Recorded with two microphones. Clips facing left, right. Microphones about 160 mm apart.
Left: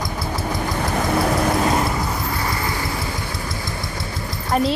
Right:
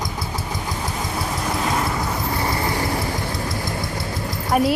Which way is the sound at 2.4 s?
30° right (ahead or behind).